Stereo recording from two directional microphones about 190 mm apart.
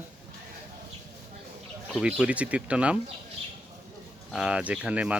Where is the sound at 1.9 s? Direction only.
Centre (ahead or behind).